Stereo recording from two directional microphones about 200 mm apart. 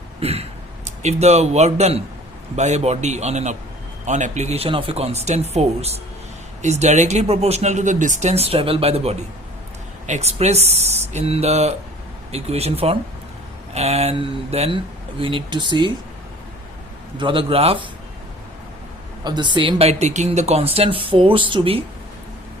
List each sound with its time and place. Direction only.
0.2 s a sound: 30° right (ahead or behind)
1.0 s speech: 35° right (ahead or behind)
17.2 s speech: 25° right (ahead or behind)
19.2 s speech: 20° right (ahead or behind)